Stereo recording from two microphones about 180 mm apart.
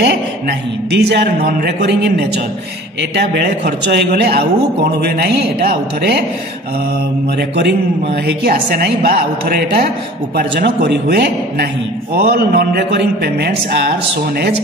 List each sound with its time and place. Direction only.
0.9 s a man's voice: 70° right (ahead or behind)
7.3 s a woman's voice: 65° right (ahead or behind)